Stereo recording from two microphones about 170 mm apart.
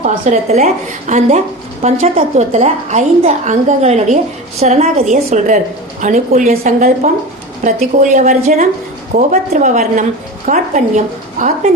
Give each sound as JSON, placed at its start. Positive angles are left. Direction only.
{"t": 0.0, "sound": "a woman's voice", "side_deg": -40}